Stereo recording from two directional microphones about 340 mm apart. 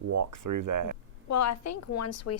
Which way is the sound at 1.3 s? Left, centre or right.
Left.